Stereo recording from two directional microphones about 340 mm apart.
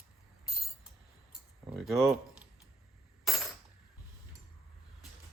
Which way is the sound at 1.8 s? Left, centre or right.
Centre.